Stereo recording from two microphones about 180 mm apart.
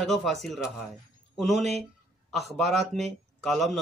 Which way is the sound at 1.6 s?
35° right (ahead or behind).